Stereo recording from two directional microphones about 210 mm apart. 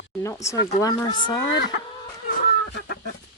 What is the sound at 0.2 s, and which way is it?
Speech, 15° left (ahead or behind).